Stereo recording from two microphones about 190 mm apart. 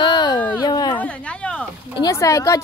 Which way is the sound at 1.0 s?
5° left (ahead or behind).